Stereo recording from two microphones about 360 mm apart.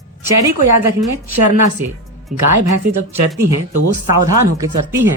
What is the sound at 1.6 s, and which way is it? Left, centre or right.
Speech, right.